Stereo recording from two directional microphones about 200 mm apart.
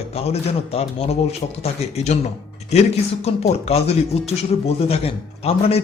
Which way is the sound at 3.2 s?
30° left (ahead or behind).